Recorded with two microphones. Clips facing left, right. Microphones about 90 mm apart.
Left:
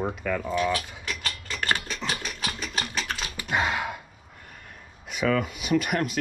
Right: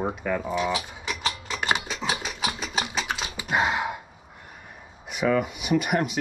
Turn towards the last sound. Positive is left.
turn(degrees=-10)  # may be behind; listen again after turning